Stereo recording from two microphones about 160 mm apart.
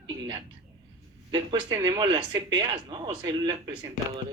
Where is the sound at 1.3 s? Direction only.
30° right (ahead or behind).